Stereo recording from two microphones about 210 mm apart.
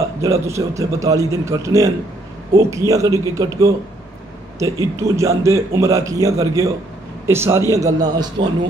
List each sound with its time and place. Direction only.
0.2 s speech: 15° right (ahead or behind)